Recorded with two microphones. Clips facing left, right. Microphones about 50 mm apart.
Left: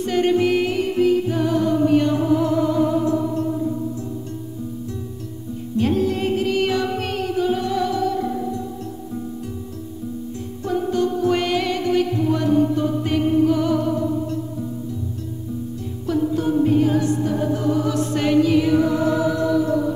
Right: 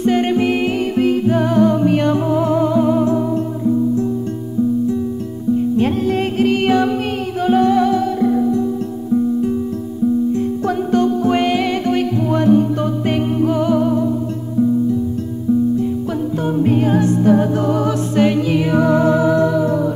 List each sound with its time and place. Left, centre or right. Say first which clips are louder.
0.0 s music: right 3 dB; right
0.7 s music: right 2 dB; right
2.2 s music: right 3 dB; right
5.8 s music: right 3 dB; right
11.2 s music: right 4 dB; right
11.8 s music: right 2 dB; right
13.6 s music: right 4 dB; right
15.8 s music: right 3 dB; right
16.6 s music: right 4 dB; right
18.1 s music: right 1 dB; right
18.8 s music: right 5 dB; right
19.0 s music: right 5 dB; right